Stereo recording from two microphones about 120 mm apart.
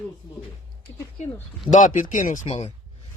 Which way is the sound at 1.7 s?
90° left.